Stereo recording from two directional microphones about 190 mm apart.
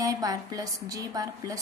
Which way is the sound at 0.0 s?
20° right (ahead or behind).